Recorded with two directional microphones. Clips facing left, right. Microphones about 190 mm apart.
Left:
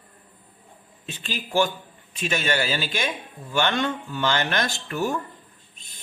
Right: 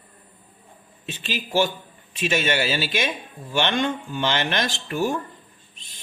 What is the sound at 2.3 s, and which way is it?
Speech, 20° right (ahead or behind).